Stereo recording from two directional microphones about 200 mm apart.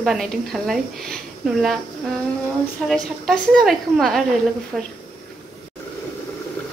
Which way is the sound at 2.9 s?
Centre (ahead or behind).